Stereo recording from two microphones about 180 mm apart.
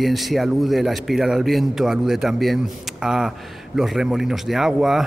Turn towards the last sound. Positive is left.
turn(degrees=0)  # may be behind; listen again after turning